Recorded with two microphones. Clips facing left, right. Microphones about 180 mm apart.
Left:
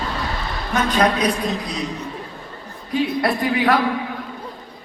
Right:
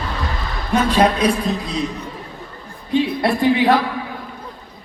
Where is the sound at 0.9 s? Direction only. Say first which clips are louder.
Right 2 dB; 30° right (ahead or behind).